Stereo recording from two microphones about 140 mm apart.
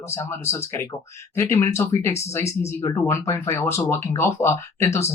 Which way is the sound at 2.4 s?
50° left (ahead or behind).